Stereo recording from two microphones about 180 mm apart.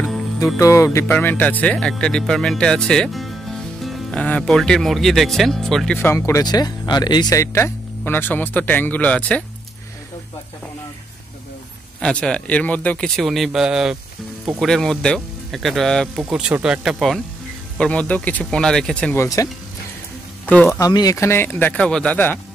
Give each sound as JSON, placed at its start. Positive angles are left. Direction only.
{"t": 0.6, "sound": "speech", "side_deg": 15}
{"t": 5.9, "sound": "speech", "side_deg": 15}
{"t": 12.0, "sound": "speech", "side_deg": 5}
{"t": 19.2, "sound": "speech", "side_deg": 20}
{"t": 20.8, "sound": "speech", "side_deg": 20}